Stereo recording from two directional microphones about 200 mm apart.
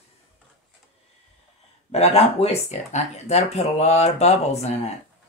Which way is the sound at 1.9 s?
30° left (ahead or behind).